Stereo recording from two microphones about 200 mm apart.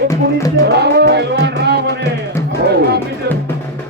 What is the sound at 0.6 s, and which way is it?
Music, 55° right (ahead or behind).